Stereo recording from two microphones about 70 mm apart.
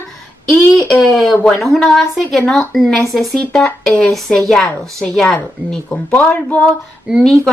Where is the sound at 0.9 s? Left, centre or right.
Centre; by 6.6 s left.